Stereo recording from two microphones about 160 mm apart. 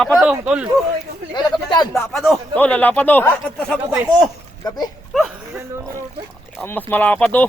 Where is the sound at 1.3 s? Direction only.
25° left (ahead or behind).